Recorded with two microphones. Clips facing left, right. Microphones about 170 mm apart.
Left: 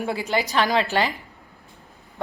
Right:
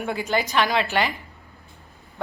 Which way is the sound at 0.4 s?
40° left (ahead or behind).